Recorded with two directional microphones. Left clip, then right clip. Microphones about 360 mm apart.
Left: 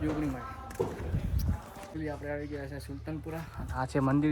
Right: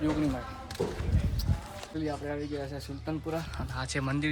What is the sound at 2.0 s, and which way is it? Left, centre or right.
Speech, centre.